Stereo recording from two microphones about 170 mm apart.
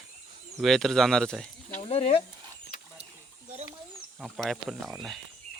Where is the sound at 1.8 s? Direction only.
35° left (ahead or behind).